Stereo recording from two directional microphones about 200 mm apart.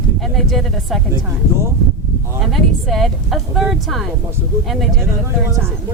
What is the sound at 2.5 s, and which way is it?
Speech, centre (ahead or behind).